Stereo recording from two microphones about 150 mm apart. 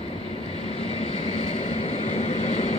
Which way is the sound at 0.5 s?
45° left (ahead or behind).